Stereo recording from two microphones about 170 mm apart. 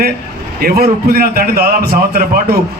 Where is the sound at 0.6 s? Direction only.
65° right (ahead or behind).